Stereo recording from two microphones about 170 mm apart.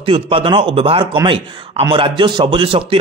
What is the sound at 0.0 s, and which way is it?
A man's voice, 30° right (ahead or behind).